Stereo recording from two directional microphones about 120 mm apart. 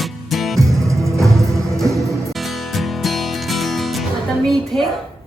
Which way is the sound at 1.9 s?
25° right (ahead or behind).